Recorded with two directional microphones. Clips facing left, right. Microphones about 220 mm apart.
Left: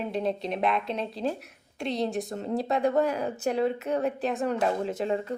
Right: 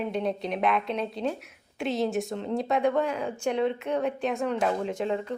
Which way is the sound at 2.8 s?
40° left (ahead or behind).